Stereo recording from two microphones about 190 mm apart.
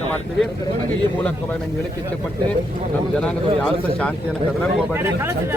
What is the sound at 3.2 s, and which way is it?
Speech, 5° left (ahead or behind).